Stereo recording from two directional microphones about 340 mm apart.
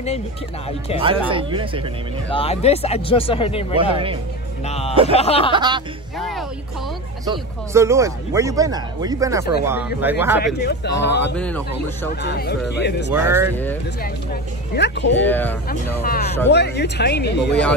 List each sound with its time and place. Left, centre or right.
0.9 s speech: centre
2.3 s speech: centre
4.6 s speech: centre
5.5 s speech: centre
6.1 s speech: centre
10.4 s speech: left
11.3 s speech: centre
12.2 s speech: left
13.1 s speech: centre
14.8 s speech: left
15.1 s speech: centre
15.7 s speech: left